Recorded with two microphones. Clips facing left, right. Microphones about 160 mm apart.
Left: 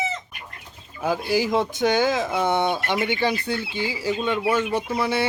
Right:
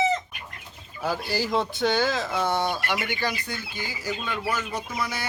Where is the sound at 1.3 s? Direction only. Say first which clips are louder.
Left 4 dB; 15° left (ahead or behind).